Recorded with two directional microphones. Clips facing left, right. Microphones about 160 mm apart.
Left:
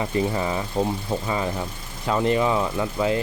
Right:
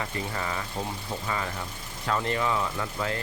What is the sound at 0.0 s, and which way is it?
Speech, 20° left (ahead or behind).